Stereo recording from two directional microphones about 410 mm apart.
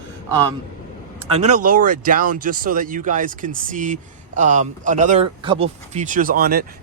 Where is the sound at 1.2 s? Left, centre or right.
Centre.